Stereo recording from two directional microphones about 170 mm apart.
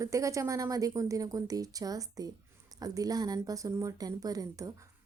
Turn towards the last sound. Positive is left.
turn(degrees=-20)  # may be behind; listen again after turning